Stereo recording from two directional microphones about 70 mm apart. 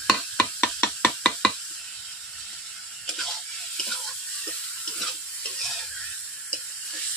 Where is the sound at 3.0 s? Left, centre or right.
Centre.